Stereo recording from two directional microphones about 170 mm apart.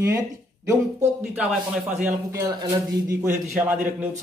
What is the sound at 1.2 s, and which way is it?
Speech, 10° right (ahead or behind).